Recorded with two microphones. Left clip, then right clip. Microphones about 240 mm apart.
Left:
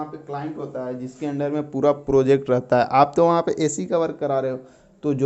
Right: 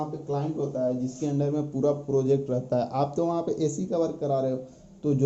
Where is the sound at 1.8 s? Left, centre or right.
Left.